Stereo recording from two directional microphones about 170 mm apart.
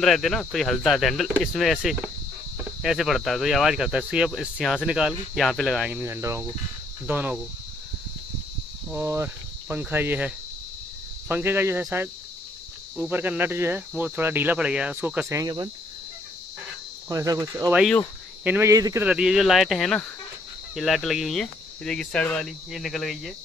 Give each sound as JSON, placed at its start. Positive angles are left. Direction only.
{"t": 0.0, "sound": "speech", "side_deg": 0}
{"t": 8.9, "sound": "cricket", "side_deg": -15}
{"t": 11.2, "sound": "speech", "side_deg": -10}
{"t": 17.1, "sound": "cricket", "side_deg": -20}
{"t": 18.4, "sound": "speech", "side_deg": -15}
{"t": 19.0, "sound": "speech", "side_deg": -5}